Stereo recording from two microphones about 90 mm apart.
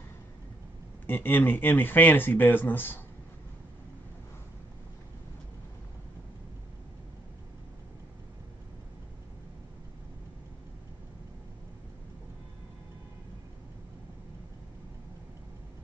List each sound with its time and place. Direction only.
1.0 s speech: 25° left (ahead or behind)